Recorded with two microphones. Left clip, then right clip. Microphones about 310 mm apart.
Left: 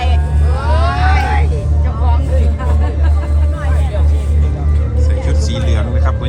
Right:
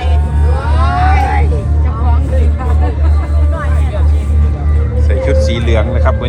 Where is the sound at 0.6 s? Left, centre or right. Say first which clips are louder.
Right 2 dB; centre.